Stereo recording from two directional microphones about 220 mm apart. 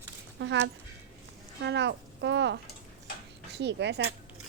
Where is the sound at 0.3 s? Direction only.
55° right (ahead or behind).